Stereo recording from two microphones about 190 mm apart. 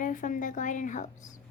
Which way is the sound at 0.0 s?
45° left (ahead or behind).